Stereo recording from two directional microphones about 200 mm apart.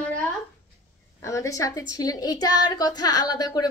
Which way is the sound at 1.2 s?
15° left (ahead or behind).